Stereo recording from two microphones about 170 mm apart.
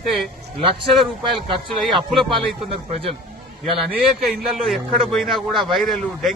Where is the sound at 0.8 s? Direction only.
Centre (ahead or behind).